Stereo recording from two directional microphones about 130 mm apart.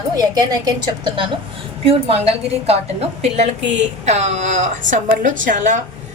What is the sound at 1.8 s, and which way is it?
A woman's voice, 50° right (ahead or behind).